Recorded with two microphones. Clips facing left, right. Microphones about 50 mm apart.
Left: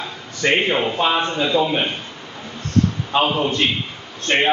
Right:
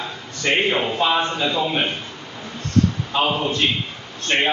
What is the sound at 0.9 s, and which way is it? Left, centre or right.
Speech, centre.